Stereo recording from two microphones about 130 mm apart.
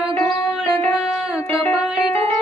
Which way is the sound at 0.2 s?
15° left (ahead or behind).